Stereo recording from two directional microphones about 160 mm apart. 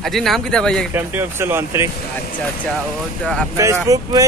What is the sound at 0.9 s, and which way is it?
Speech, 15° right (ahead or behind).